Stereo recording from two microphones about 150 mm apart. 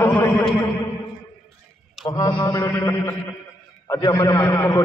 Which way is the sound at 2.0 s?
25° left (ahead or behind).